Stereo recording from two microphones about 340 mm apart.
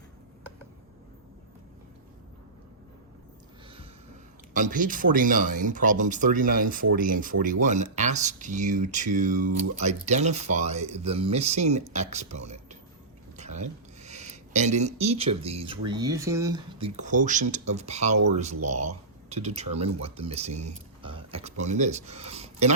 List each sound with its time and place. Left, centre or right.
4.5 s speech: right
13.3 s a sound: centre
15.9 s speech: centre